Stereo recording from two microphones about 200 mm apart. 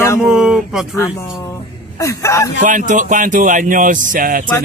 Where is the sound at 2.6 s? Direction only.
40° right (ahead or behind).